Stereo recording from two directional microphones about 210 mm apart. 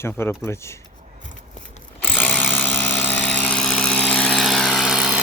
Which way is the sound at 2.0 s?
10° left (ahead or behind).